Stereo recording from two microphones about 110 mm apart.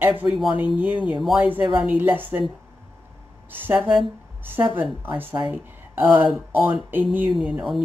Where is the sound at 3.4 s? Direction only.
15° right (ahead or behind).